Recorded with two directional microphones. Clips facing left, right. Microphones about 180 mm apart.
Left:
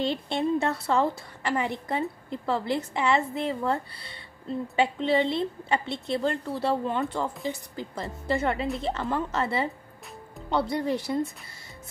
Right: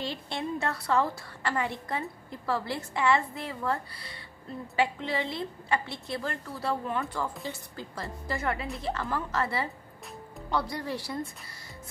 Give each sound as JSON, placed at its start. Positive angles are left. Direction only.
{"t": 0.0, "sound": "a woman's voice", "side_deg": 25}